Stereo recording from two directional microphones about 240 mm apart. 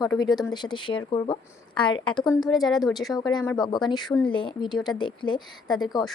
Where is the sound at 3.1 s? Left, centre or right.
Centre.